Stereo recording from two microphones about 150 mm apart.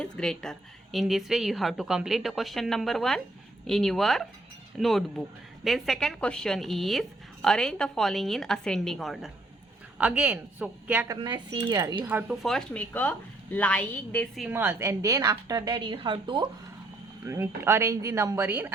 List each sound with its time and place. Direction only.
0.0 s a woman's voice: 5° left (ahead or behind)
11.1 s a woman's voice: 30° right (ahead or behind)
12.3 s a woman's voice: centre (ahead or behind)
14.5 s a woman's voice: 15° right (ahead or behind); by 16.5 s 30° right (ahead or behind)
17.2 s speech: 15° right (ahead or behind)